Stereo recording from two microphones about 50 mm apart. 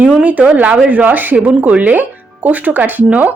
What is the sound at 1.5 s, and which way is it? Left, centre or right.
A woman's voice, right.